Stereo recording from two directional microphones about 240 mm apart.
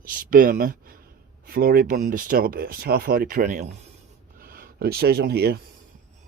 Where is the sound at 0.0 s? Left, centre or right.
Right.